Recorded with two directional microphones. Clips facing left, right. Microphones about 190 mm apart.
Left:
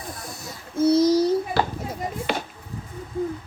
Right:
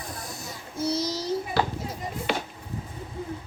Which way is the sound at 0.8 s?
55° left (ahead or behind).